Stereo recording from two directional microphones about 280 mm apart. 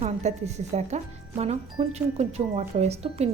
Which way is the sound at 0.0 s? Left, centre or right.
Right.